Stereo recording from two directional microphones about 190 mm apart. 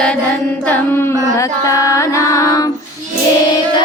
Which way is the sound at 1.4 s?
15° left (ahead or behind).